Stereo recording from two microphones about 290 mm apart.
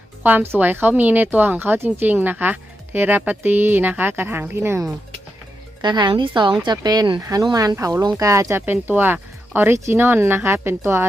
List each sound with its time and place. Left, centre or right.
0.2 s speech: centre